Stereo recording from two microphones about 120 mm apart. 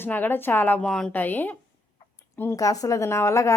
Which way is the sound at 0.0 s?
15° left (ahead or behind).